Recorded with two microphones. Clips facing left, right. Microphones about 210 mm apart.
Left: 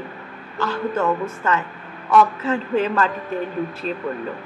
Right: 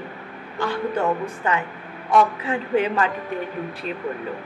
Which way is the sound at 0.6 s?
15° right (ahead or behind).